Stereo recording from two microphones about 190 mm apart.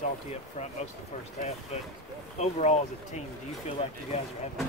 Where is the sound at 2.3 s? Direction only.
35° left (ahead or behind).